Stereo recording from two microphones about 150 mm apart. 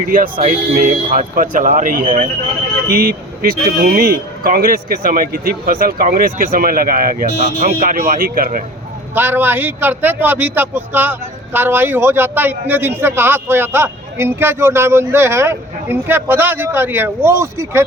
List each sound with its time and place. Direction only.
0.1 s speech: 65° right (ahead or behind)
9.1 s a man's voice: 15° right (ahead or behind)